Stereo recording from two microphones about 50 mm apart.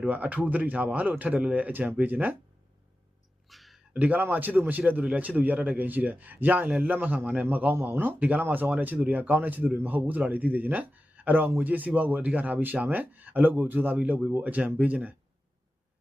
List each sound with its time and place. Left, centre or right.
0.0 s a man's voice: right
3.5 s a sound: centre
3.9 s a man's voice: right